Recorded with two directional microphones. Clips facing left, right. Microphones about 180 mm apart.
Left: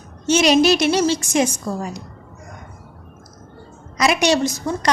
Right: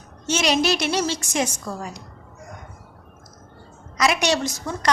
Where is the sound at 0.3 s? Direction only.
15° left (ahead or behind).